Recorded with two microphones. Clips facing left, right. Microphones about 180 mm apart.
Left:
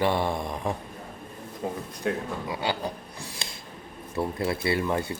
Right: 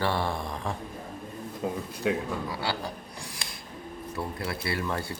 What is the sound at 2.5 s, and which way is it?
Speech, 20° left (ahead or behind).